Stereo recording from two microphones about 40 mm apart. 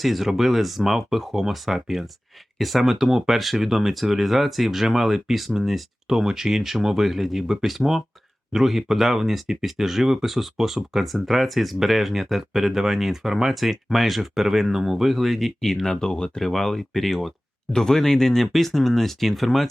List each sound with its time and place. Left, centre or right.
0.0 s speech: centre
15.6 s speech: centre
16.4 s speech: centre
17.7 s speech: centre